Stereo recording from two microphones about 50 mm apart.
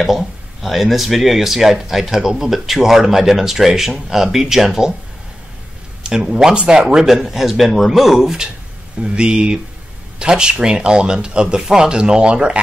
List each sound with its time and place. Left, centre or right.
0.0 s speech: centre
6.0 s speech: centre
9.0 s speech: centre